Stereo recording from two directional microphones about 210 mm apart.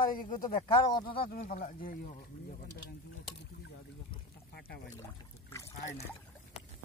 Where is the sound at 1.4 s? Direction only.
40° left (ahead or behind).